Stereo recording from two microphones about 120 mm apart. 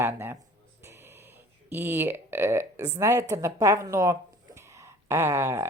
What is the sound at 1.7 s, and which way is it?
Speech, 20° right (ahead or behind).